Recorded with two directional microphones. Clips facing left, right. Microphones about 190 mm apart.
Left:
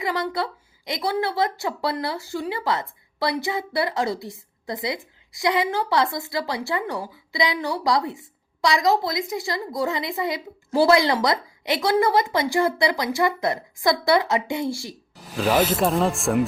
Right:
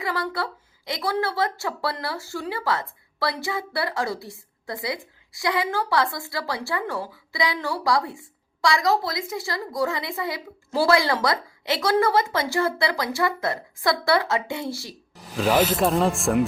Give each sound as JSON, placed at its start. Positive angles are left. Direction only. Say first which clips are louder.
{"t": 0.0, "sound": "a woman's voice", "louder": "left 2 dB", "side_deg": 20}
{"t": 15.1, "sound": "speech", "louder": "even", "side_deg": 0}